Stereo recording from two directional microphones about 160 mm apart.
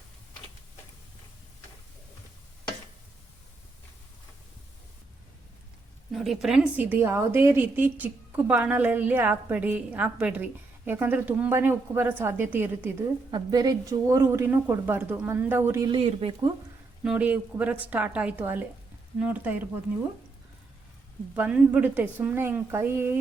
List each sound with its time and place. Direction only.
6.1 s a woman's voice: centre (ahead or behind)
13.3 s a woman's voice: 25° right (ahead or behind)
15.9 s speech: 35° right (ahead or behind)
17.0 s a woman's voice: 5° right (ahead or behind)
21.3 s a woman's voice: 10° right (ahead or behind)